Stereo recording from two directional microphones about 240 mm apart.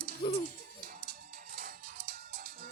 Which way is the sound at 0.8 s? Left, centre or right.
Right.